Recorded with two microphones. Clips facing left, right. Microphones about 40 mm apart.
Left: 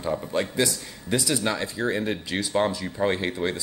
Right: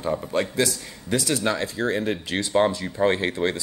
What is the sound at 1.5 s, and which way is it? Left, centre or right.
Speech, centre.